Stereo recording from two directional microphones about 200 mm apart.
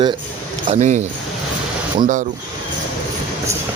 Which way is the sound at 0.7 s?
35° right (ahead or behind).